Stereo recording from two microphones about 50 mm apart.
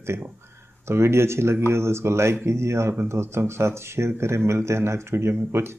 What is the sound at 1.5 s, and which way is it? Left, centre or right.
Speech, right.